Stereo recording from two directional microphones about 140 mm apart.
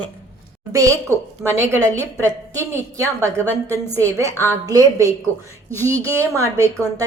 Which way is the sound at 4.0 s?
20° right (ahead or behind).